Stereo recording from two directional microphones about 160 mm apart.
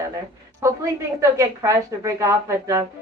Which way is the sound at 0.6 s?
15° right (ahead or behind).